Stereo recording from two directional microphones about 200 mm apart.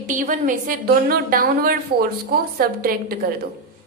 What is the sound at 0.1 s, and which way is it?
A woman's voice, 40° right (ahead or behind).